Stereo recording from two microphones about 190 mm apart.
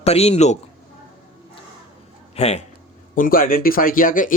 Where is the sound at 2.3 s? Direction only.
35° left (ahead or behind).